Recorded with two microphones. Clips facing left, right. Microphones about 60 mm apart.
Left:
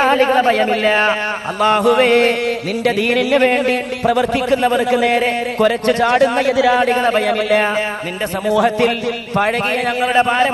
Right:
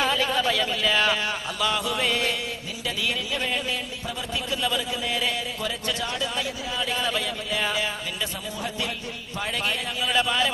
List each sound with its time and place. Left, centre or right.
0.0 s a man's voice: left
6.8 s a man's voice: left
7.3 s a man's voice: left